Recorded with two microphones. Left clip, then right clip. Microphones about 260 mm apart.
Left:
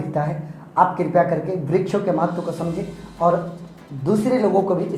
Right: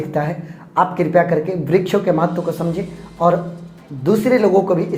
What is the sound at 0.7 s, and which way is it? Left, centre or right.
Speech, right.